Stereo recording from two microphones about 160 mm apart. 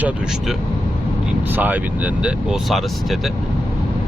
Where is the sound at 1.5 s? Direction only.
10° right (ahead or behind).